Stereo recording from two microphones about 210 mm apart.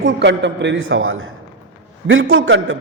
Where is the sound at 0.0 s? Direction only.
55° right (ahead or behind).